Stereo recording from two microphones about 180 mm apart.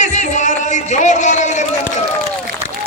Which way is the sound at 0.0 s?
40° left (ahead or behind).